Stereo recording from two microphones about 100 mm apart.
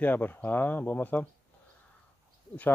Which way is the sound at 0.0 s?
20° left (ahead or behind).